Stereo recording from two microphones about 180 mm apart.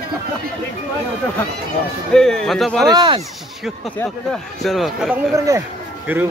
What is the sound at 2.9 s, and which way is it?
Speech, 25° right (ahead or behind).